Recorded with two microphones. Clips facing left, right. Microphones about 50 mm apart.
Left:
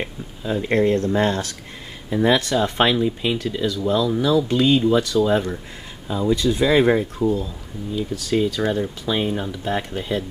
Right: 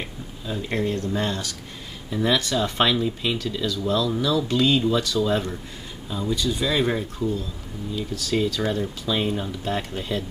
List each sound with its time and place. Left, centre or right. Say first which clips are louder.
0.0 s speech: left 5 dB; left
8.3 s speech: left 3 dB; centre